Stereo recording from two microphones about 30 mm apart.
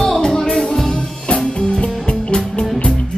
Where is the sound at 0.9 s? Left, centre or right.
Left.